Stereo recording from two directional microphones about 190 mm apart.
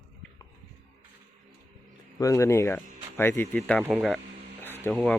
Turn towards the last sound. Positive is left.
turn(degrees=0)  # may be behind; listen again after turning